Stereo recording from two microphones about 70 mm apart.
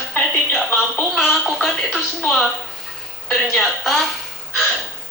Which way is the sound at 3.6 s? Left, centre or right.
Centre.